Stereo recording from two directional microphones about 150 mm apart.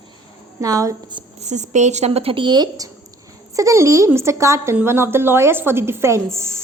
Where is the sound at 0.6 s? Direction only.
20° right (ahead or behind).